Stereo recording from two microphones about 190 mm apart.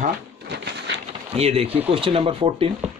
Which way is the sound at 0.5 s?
65° right (ahead or behind).